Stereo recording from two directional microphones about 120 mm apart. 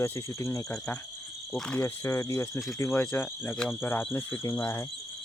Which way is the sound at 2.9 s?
15° left (ahead or behind).